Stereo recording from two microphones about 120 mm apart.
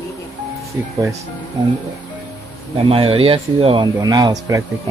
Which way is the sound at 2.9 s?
50° right (ahead or behind).